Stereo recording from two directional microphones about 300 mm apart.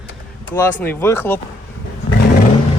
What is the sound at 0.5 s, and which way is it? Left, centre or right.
Speech, centre.